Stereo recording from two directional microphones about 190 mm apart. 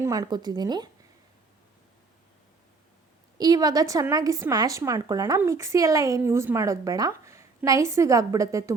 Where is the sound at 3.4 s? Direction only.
20° right (ahead or behind).